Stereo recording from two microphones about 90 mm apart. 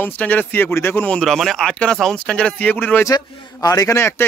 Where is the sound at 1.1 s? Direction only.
5° left (ahead or behind); by 3.0 s 20° left (ahead or behind).